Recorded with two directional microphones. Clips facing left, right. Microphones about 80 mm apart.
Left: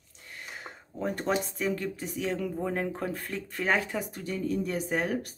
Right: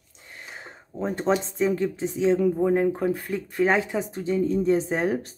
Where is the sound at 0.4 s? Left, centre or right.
Right.